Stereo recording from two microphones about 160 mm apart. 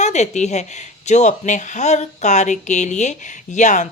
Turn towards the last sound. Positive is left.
turn(degrees=50)  # may be behind; listen again after turning